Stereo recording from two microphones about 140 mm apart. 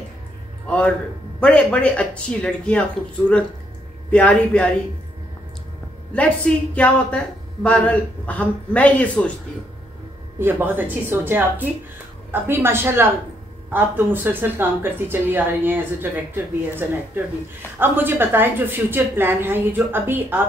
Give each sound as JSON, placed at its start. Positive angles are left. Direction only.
{"t": 0.7, "sound": "speech", "side_deg": 10}
{"t": 4.1, "sound": "speech", "side_deg": 10}
{"t": 6.1, "sound": "speech", "side_deg": 10}
{"t": 10.4, "sound": "speech", "side_deg": -15}